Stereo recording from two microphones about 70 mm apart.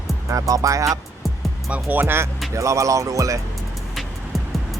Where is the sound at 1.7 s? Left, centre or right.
Right.